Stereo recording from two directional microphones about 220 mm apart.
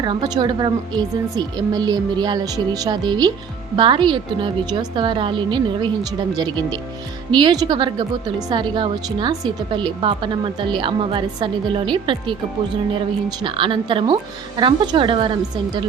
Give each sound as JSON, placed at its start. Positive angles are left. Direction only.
{"t": 0.0, "sound": "a woman's voice", "side_deg": -20}
{"t": 13.4, "sound": "a woman's voice", "side_deg": -20}